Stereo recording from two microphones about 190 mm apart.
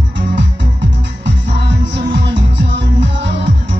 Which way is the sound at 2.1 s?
65° right (ahead or behind).